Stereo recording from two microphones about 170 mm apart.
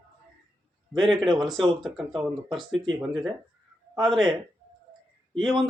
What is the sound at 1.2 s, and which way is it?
Speech, centre (ahead or behind).